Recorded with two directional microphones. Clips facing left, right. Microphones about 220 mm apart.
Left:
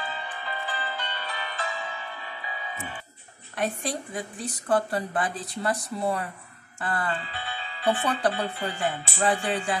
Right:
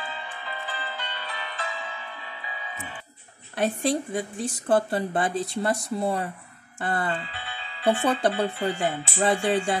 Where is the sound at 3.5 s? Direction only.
30° right (ahead or behind).